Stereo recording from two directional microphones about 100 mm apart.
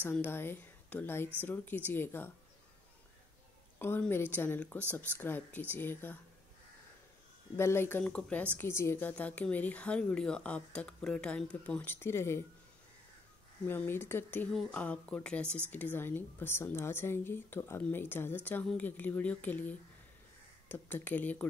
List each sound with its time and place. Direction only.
0.0 s a woman's voice: 20° left (ahead or behind)
4.1 s a woman's voice: 20° left (ahead or behind)
7.5 s a woman's voice: 25° left (ahead or behind)
8.0 s speech: 15° left (ahead or behind)
8.5 s a woman's voice: 25° left (ahead or behind)
9.1 s speech: 15° left (ahead or behind)
11.8 s a woman's voice: 25° left (ahead or behind)
13.7 s a woman's voice: 20° left (ahead or behind)